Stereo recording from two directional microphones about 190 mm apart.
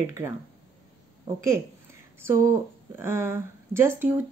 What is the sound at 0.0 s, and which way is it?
Speech, 15° right (ahead or behind).